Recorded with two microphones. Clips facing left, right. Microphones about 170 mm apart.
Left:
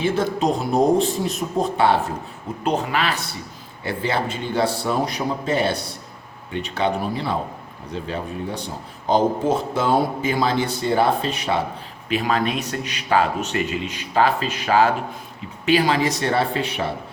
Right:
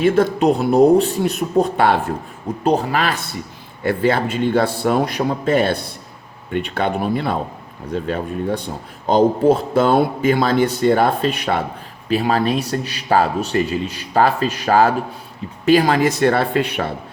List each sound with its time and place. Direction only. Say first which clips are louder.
0.0 s speech: right 6 dB; 60° right (ahead or behind)
2.6 s a man's voice: right 4 dB; 35° right (ahead or behind); by 8.7 s 55° right (ahead or behind)
9.7 s speech: right 5 dB; 60° right (ahead or behind)
12.0 s a man's voice: right 4 dB; 35° right (ahead or behind); by 16.9 s 60° right (ahead or behind)